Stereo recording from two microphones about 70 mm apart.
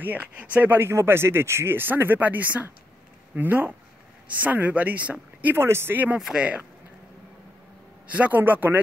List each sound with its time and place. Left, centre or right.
0.0 s speech: right
5.6 s speech: right
6.1 s speech: centre
8.1 s speech: right